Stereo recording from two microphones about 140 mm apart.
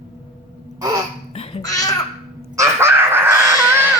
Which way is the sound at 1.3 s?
45° left (ahead or behind).